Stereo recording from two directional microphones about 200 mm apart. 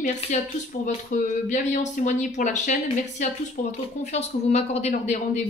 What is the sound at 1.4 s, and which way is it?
Speech, 40° left (ahead or behind).